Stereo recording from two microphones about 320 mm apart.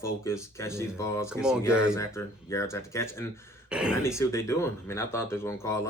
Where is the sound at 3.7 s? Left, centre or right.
Centre.